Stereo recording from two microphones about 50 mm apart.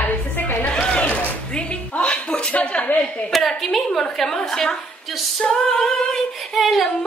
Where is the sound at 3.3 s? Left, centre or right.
Centre.